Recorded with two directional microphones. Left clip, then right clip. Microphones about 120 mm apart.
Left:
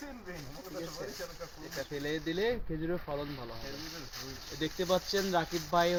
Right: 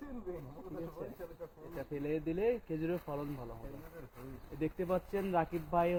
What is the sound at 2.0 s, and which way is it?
Speech, 20° left (ahead or behind).